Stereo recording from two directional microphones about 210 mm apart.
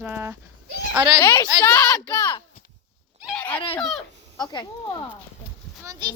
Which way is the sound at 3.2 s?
5° left (ahead or behind).